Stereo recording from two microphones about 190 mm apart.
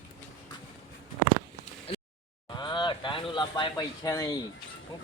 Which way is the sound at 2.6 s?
25° left (ahead or behind).